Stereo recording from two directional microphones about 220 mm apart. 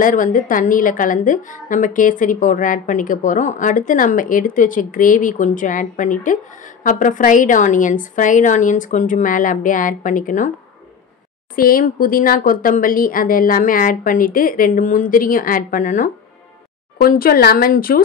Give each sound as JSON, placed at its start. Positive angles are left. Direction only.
{"t": 0.0, "sound": "a woman's voice", "side_deg": 35}
{"t": 11.5, "sound": "a woman's voice", "side_deg": 40}